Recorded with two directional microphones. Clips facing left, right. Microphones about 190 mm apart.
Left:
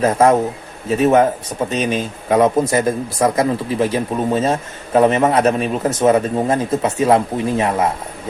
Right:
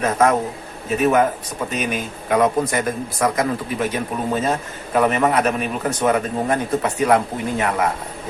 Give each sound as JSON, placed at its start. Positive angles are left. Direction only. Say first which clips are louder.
{"t": 0.0, "sound": "a man's voice", "louder": "left 4 dB", "side_deg": 30}